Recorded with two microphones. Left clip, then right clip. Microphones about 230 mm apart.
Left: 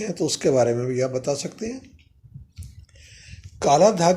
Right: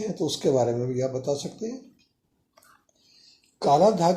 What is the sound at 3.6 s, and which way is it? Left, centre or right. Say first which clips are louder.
Speech: left 3 dB; left.